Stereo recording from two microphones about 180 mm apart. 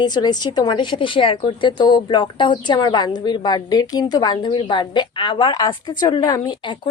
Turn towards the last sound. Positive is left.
turn(degrees=25)  # may be behind; listen again after turning